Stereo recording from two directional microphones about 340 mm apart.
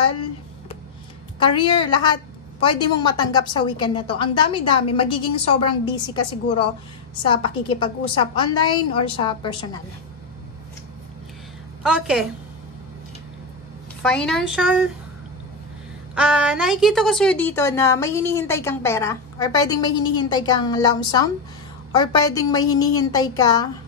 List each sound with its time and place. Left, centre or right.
1.4 s a woman's voice: centre
7.8 s a woman's voice: centre
11.8 s a woman's voice: centre
14.0 s a woman's voice: centre
16.2 s a woman's voice: centre